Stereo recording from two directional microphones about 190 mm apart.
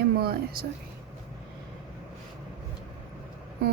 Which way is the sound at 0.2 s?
55° right (ahead or behind).